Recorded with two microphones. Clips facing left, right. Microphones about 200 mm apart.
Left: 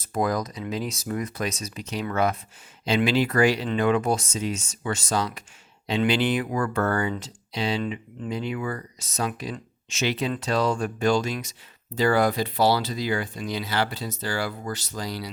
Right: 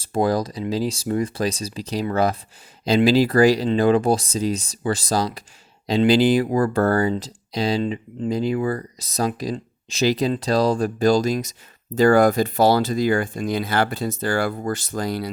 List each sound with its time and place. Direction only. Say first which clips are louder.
0.0 s speech: right 5 dB; 30° right (ahead or behind); by 15.3 s 50° right (ahead or behind)